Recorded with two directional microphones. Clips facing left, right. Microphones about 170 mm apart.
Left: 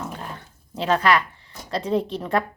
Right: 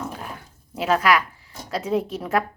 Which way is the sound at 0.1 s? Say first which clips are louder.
Even; 10° right (ahead or behind).